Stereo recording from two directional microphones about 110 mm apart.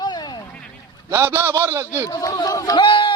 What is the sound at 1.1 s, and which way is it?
A man's voice, 20° right (ahead or behind).